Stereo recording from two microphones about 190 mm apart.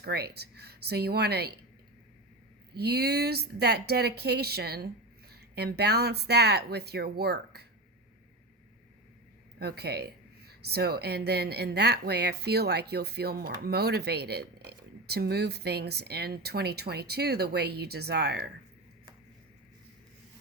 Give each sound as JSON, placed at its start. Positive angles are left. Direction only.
{"t": 0.0, "sound": "speech", "side_deg": -55}
{"t": 2.7, "sound": "speech", "side_deg": -55}
{"t": 9.6, "sound": "speech", "side_deg": -60}